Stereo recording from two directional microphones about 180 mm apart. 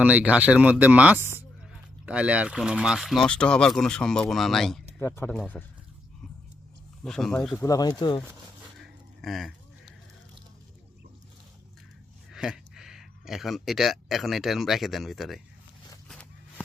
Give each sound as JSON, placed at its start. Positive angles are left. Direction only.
{"t": 0.0, "sound": "speech", "side_deg": -5}
{"t": 4.9, "sound": "speech", "side_deg": 15}
{"t": 7.0, "sound": "speech", "side_deg": 5}
{"t": 7.6, "sound": "speech", "side_deg": 20}
{"t": 8.8, "sound": "a sound", "side_deg": 0}
{"t": 12.3, "sound": "speech", "side_deg": -5}
{"t": 16.0, "sound": "a sound", "side_deg": 5}